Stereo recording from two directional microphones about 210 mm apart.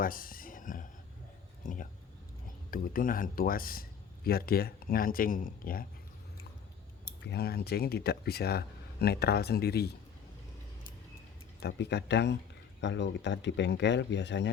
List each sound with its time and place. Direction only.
0.0 s a sound: 40° left (ahead or behind)
1.6 s speech: 40° left (ahead or behind)
7.3 s speech: 50° left (ahead or behind)
11.6 s speech: 55° left (ahead or behind)